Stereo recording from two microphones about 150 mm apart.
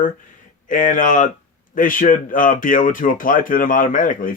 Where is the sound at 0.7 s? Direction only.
60° left (ahead or behind).